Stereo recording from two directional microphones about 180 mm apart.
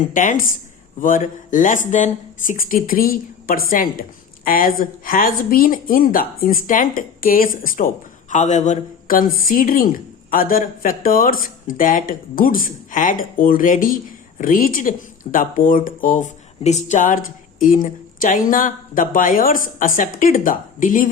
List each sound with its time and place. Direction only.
0.1 s speech: 45° left (ahead or behind)